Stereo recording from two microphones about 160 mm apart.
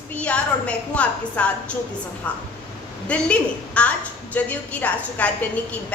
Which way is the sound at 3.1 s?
10° left (ahead or behind).